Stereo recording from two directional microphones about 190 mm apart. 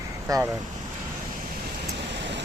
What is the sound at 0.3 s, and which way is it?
Speech, 20° right (ahead or behind).